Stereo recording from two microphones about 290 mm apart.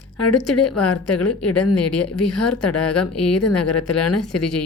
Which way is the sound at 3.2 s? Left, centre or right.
Left.